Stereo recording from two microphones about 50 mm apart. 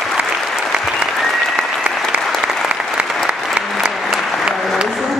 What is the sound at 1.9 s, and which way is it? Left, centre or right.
Applause, right.